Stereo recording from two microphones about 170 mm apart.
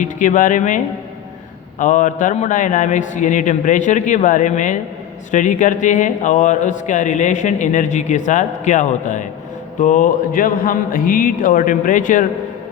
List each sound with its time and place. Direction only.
0.0 s speech: 50° left (ahead or behind)
1.8 s speech: 50° left (ahead or behind)